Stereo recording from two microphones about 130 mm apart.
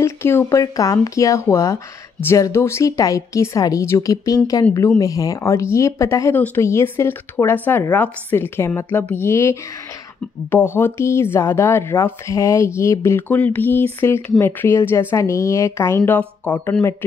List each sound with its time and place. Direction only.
0.0 s speech: 20° left (ahead or behind)